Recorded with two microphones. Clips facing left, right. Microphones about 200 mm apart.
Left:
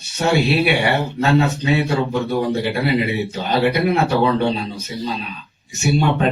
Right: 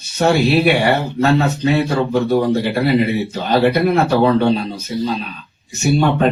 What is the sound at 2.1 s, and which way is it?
Speech, 45° right (ahead or behind).